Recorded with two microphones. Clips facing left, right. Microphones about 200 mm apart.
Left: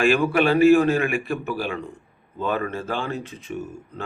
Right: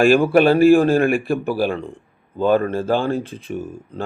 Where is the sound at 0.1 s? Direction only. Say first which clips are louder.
Right 6 dB; 35° right (ahead or behind).